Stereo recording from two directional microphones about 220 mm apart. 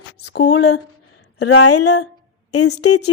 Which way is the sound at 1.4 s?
85° left.